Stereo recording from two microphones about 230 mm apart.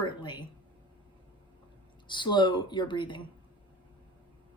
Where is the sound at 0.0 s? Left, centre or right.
Left.